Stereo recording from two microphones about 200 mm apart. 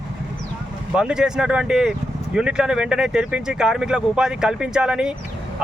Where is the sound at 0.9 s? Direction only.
5° right (ahead or behind).